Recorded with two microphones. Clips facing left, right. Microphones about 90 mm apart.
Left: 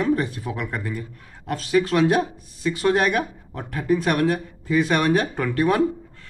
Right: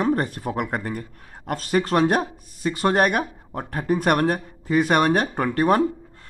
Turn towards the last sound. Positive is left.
turn(degrees=-40)  # may be behind; listen again after turning